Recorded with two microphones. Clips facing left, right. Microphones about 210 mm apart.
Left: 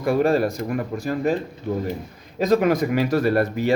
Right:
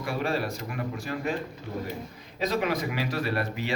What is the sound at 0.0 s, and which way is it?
A man's voice, 45° left (ahead or behind).